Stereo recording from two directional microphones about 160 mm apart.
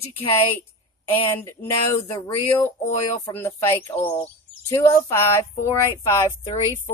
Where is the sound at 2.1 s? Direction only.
25° left (ahead or behind).